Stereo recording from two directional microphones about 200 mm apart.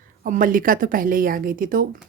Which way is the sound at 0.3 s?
40° right (ahead or behind).